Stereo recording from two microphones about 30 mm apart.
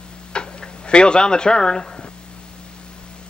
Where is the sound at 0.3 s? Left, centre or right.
Left.